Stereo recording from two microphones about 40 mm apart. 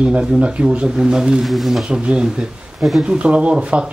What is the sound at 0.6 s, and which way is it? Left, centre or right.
Speech, right.